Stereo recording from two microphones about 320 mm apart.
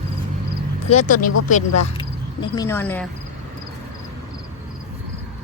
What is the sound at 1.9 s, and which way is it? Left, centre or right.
Speech, centre.